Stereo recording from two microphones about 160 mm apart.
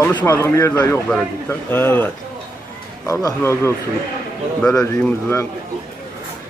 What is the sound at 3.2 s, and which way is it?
Speech, 20° left (ahead or behind).